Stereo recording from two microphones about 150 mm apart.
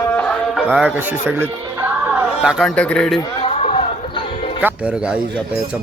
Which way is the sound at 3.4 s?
40° left (ahead or behind).